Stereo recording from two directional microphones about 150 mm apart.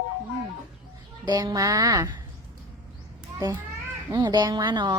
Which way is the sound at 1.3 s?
25° right (ahead or behind).